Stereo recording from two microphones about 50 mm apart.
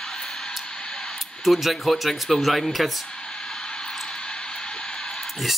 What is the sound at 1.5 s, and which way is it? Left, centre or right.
Speech, centre.